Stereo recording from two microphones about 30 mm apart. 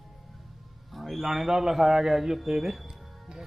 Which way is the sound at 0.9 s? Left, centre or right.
Centre.